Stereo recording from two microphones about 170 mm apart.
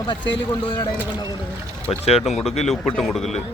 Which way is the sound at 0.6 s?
25° left (ahead or behind).